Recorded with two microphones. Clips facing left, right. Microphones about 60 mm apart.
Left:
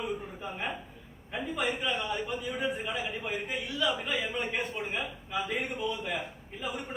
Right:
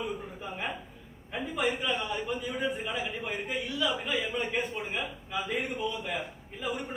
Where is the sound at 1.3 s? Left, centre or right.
Centre.